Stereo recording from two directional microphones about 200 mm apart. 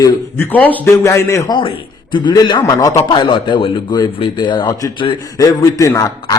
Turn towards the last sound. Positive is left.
turn(degrees=15)  # may be behind; listen again after turning